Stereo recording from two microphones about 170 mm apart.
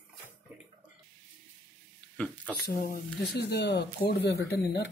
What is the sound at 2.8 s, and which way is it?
Speech, 70° left (ahead or behind).